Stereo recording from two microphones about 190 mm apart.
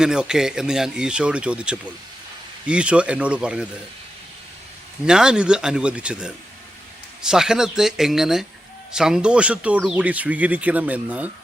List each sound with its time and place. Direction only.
0.0 s speech: 5° right (ahead or behind)
5.0 s speech: 5° right (ahead or behind)